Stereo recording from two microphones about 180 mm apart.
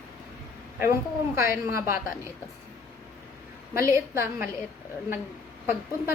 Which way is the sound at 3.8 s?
15° right (ahead or behind).